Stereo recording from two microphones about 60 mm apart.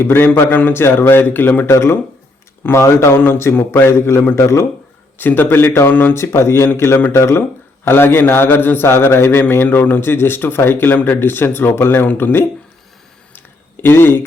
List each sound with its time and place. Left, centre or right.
0.0 s speech: left
1.7 s a man's voice: left
4.4 s a man's voice: left
5.2 s speech: left
6.1 s a man's voice: left
13.8 s speech: left